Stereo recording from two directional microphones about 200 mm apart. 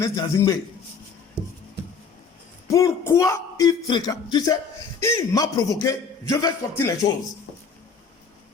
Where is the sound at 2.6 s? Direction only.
15° left (ahead or behind).